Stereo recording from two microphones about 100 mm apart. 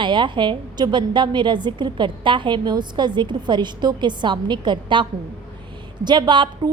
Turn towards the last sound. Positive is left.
turn(degrees=-45)  # may be behind; listen again after turning